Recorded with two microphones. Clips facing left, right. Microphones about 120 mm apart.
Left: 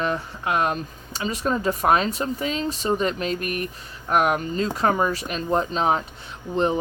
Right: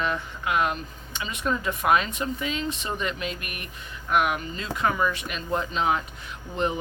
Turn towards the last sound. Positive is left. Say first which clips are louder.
# left 5 dB
turn(degrees=35)  # may be behind; listen again after turning